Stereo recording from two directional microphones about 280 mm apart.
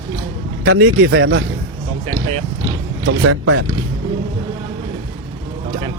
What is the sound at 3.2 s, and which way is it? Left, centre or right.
Speech, right.